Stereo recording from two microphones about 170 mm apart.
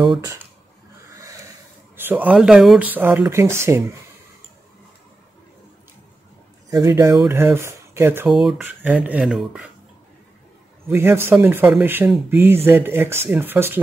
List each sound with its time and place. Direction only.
0.0 s speech: 25° right (ahead or behind)
2.0 s speech: 10° right (ahead or behind)
6.7 s speech: 20° right (ahead or behind)
8.3 s speech: centre (ahead or behind)
10.9 s speech: 15° right (ahead or behind)